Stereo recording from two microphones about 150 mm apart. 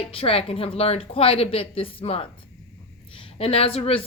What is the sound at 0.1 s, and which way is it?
A woman's voice, 40° left (ahead or behind).